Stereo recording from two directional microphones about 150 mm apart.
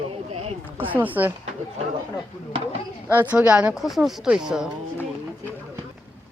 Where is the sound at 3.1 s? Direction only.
10° right (ahead or behind).